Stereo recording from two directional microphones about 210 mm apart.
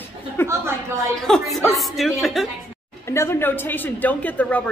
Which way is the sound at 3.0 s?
10° left (ahead or behind).